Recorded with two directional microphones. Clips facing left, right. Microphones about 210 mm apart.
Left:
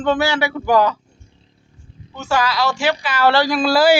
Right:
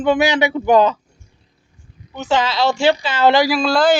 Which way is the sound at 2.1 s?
20° right (ahead or behind).